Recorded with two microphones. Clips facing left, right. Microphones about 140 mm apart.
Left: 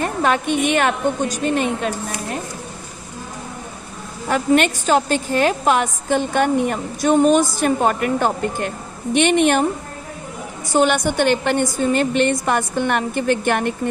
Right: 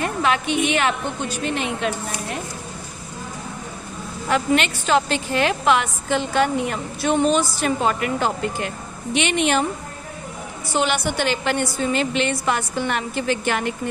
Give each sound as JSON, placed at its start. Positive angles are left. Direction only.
{"t": 0.0, "sound": "a woman's voice", "side_deg": 45}
{"t": 4.3, "sound": "a woman's voice", "side_deg": 45}
{"t": 10.7, "sound": "a woman's voice", "side_deg": 45}